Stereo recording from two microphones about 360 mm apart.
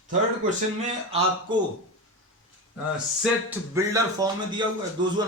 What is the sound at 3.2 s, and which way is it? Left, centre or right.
Speech, centre.